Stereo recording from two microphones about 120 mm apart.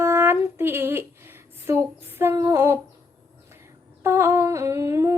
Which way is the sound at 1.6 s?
20° right (ahead or behind).